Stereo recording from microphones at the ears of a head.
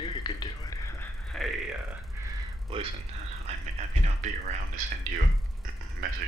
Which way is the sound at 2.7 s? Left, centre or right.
Right.